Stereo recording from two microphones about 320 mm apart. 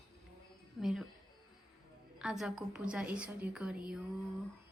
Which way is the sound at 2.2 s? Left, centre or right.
Centre.